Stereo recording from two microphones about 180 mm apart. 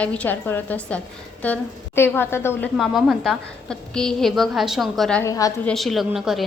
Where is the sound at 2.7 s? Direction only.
Centre (ahead or behind).